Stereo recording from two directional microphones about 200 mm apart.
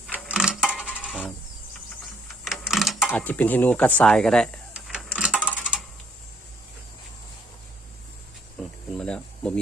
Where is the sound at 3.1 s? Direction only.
10° left (ahead or behind).